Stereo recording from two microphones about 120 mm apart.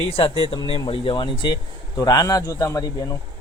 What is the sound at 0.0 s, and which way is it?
Speech, 55° left (ahead or behind).